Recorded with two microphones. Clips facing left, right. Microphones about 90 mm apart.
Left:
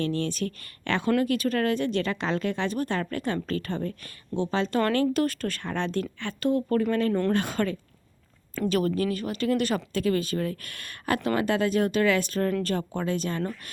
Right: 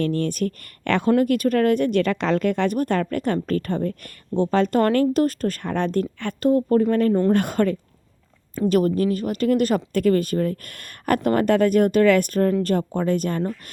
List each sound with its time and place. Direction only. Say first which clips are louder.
0.0 s speech: right 5 dB; 50° right (ahead or behind)
6.6 s speech: right 6 dB; 30° right (ahead or behind)
7.3 s speech: right 6 dB; 50° right (ahead or behind)